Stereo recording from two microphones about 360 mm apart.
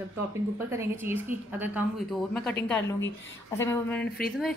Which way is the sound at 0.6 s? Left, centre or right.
Centre.